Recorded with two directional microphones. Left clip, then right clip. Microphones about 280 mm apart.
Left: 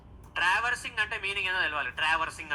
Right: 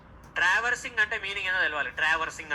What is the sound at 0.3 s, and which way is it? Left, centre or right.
Speech, centre.